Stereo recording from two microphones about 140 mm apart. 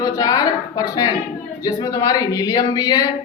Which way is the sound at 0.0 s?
25° left (ahead or behind).